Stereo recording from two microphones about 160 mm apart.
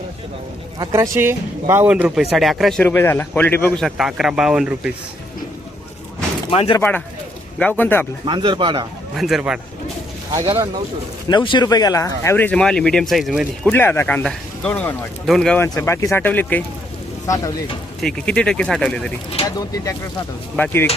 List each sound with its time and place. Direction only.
0.8 s speech: 25° right (ahead or behind); by 2.8 s centre (ahead or behind)
2.8 s speech: 15° left (ahead or behind)
3.8 s speech: centre (ahead or behind)
6.5 s speech: 35° left (ahead or behind)
6.7 s speech: 10° left (ahead or behind)
8.2 s speech: 30° right (ahead or behind)
9.1 s speech: centre (ahead or behind)
10.3 s speech: 20° right (ahead or behind)
11.3 s speech: 30° left (ahead or behind); by 13.5 s 5° right (ahead or behind)
13.7 s speech: 15° left (ahead or behind)
15.6 s speech: 15° left (ahead or behind)
18.0 s speech: 5° left (ahead or behind)
19.5 s speech: 20° left (ahead or behind)